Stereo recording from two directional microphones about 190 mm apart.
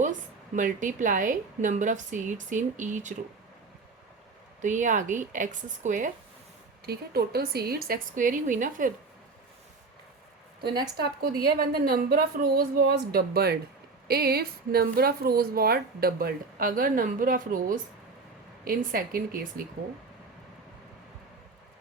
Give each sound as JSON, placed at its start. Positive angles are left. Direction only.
{"t": 0.0, "sound": "a woman's voice", "side_deg": -40}
{"t": 4.6, "sound": "a woman's voice", "side_deg": -40}
{"t": 6.8, "sound": "speech", "side_deg": -55}
{"t": 10.6, "sound": "speech", "side_deg": -55}